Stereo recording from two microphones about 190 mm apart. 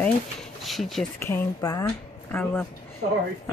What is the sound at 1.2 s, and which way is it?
Speech, 15° left (ahead or behind).